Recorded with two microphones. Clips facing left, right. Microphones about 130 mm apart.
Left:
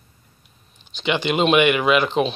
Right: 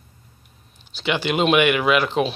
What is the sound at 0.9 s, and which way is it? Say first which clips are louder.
Speech: left 1 dB; 10° right (ahead or behind).